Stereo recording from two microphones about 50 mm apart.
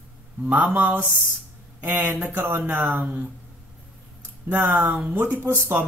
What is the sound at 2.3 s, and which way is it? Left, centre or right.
Speech, right.